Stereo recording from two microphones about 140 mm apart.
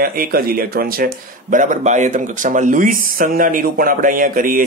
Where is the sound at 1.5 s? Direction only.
65° right (ahead or behind).